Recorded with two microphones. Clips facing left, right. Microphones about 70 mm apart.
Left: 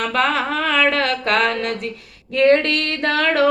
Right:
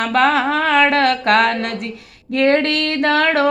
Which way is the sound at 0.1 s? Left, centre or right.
Right.